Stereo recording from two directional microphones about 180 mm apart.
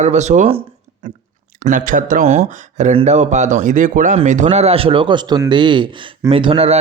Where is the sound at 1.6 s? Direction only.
50° right (ahead or behind).